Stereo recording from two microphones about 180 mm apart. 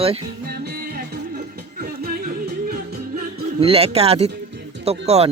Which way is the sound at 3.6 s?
35° right (ahead or behind).